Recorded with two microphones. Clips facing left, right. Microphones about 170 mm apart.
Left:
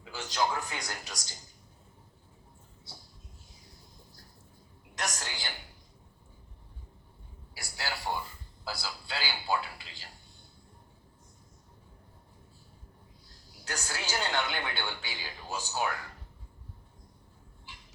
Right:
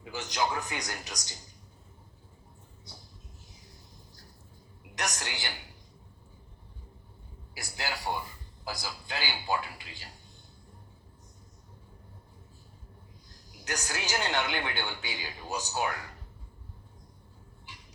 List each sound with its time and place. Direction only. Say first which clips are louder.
0.0 s a man's voice: even; 20° right (ahead or behind)
4.9 s a woman's voice: right 1 dB; 20° right (ahead or behind)
7.6 s a man's voice: right 1 dB; 20° right (ahead or behind)
13.3 s a sound: right 3 dB; 20° right (ahead or behind)
14.3 s a man's voice: right 1 dB; 20° right (ahead or behind)